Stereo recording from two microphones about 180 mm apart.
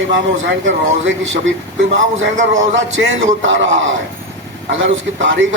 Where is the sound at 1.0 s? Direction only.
90° right.